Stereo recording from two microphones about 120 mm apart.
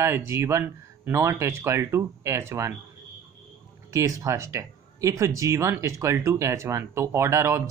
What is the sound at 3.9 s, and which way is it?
Speech, 25° right (ahead or behind).